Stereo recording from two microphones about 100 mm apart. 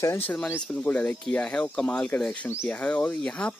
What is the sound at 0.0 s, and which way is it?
Speech, 25° left (ahead or behind).